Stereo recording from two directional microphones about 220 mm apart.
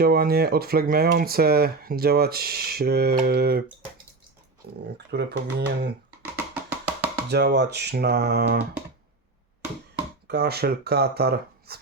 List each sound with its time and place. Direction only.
0.0 s speech: 45° right (ahead or behind)
4.6 s speech: 45° right (ahead or behind)
6.3 s music: 10° right (ahead or behind)
7.3 s speech: 50° right (ahead or behind)
10.2 s speech: 45° right (ahead or behind)